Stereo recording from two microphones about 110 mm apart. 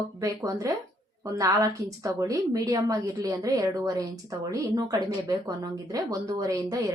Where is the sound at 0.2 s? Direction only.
30° right (ahead or behind).